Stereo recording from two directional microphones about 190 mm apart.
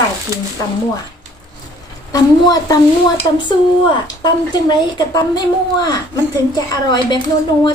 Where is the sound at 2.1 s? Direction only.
20° left (ahead or behind).